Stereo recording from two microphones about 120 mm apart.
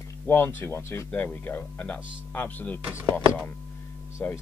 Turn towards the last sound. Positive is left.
turn(degrees=15)  # may be behind; listen again after turning